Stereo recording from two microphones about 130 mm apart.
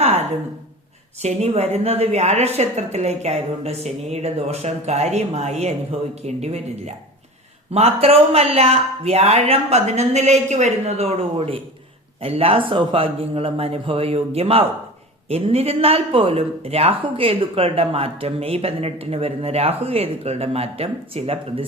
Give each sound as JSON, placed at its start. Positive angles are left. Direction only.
{"t": 1.2, "sound": "a woman's voice", "side_deg": -55}